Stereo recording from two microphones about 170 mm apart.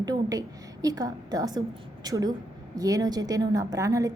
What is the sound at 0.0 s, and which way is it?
A woman's voice, 20° right (ahead or behind).